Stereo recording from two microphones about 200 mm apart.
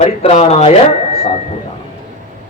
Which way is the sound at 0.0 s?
30° left (ahead or behind).